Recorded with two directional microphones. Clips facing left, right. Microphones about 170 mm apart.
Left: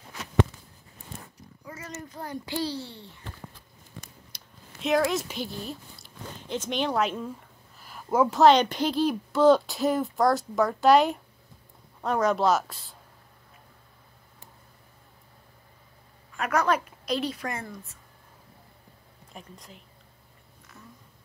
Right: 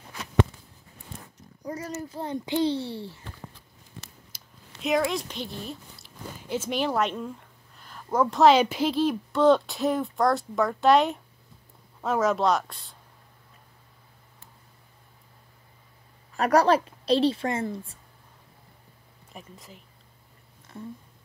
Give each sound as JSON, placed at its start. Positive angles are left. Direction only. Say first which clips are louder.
{"t": 1.6, "sound": "a sound", "louder": "right 8 dB", "side_deg": -35}
{"t": 2.1, "sound": "a child's voice", "louder": "right 5 dB", "side_deg": -25}
{"t": 4.3, "sound": "a sound", "louder": "left 1 dB", "side_deg": 0}
{"t": 4.8, "sound": "speech", "louder": "left 1 dB", "side_deg": 0}
{"t": 16.3, "sound": "a woman's voice", "louder": "right 5 dB", "side_deg": -35}
{"t": 19.3, "sound": "speech", "louder": "right 1 dB", "side_deg": 0}